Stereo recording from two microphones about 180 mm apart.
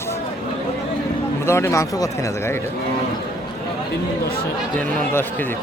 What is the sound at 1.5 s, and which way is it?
Speech, 15° left (ahead or behind).